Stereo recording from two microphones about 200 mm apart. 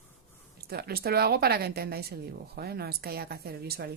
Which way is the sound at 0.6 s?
50° right (ahead or behind).